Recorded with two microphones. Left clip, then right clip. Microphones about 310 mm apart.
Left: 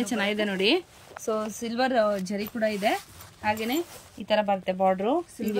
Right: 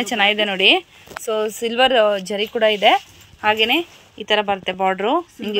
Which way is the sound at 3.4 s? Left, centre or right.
Right.